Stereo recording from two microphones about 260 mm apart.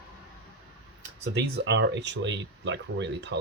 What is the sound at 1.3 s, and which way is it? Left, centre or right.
Speech, right.